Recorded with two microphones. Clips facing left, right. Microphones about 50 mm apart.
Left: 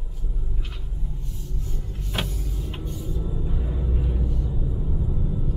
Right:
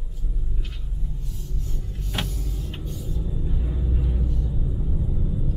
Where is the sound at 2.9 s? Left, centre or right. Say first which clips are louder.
Left 1 dB; centre.